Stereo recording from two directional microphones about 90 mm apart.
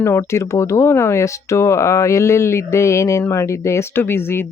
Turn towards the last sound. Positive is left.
turn(degrees=25)  # may be behind; listen again after turning